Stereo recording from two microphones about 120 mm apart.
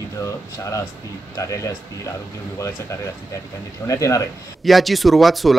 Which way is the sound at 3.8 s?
25° left (ahead or behind).